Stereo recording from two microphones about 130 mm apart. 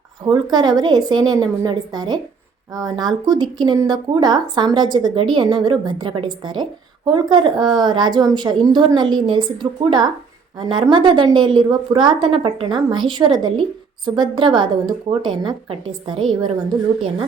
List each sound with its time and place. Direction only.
0.3 s a woman's voice: 35° right (ahead or behind)